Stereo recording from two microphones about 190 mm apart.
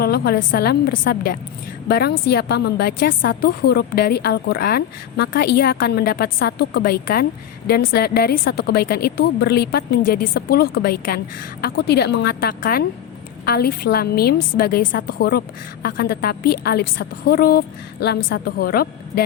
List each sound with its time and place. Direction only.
0.0 s a woman's voice: 55° left (ahead or behind)